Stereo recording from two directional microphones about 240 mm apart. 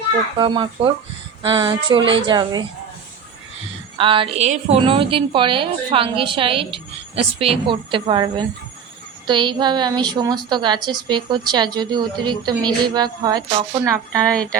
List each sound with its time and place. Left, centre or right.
0.3 s a woman's voice: centre
3.9 s a woman's voice: right